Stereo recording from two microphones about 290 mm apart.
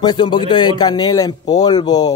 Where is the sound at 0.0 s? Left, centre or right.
Centre.